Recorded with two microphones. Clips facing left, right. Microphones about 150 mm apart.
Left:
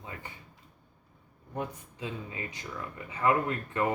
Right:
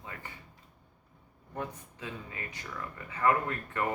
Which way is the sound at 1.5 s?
15° left (ahead or behind).